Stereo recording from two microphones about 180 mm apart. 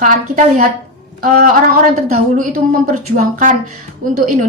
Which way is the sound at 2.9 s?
45° right (ahead or behind).